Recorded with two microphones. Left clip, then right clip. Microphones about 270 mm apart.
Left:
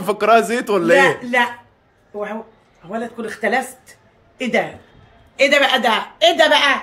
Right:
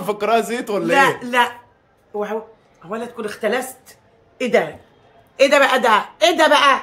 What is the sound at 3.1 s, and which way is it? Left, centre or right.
Speech, centre.